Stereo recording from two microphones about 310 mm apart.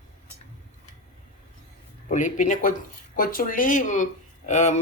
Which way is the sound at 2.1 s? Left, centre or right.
Left.